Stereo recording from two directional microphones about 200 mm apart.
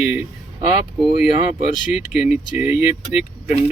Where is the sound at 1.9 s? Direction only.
Centre (ahead or behind).